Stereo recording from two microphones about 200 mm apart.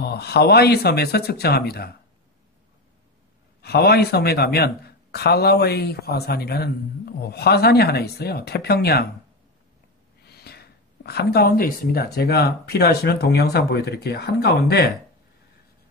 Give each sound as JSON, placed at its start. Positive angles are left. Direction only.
{"t": 0.0, "sound": "speech", "side_deg": 55}
{"t": 3.6, "sound": "speech", "side_deg": 50}
{"t": 10.2, "sound": "speech", "side_deg": 50}